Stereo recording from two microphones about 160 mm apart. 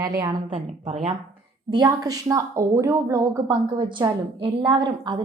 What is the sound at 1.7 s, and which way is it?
A woman's voice, 25° right (ahead or behind).